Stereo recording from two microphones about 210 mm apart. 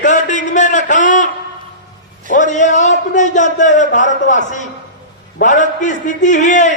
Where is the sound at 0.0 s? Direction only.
35° left (ahead or behind).